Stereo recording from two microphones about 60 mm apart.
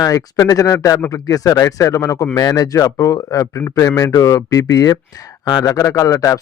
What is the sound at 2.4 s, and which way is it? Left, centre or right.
Speech, left.